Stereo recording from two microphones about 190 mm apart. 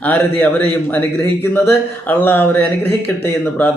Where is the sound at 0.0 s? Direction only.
10° left (ahead or behind).